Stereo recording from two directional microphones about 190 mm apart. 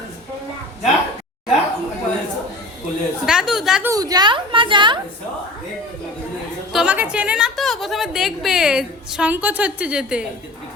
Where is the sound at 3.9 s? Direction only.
20° right (ahead or behind).